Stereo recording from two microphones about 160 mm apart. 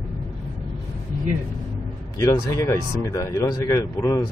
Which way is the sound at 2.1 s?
20° left (ahead or behind).